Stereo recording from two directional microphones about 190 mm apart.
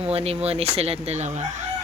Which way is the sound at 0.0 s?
30° right (ahead or behind).